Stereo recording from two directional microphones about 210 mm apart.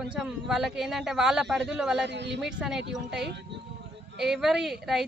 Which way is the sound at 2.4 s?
5° right (ahead or behind).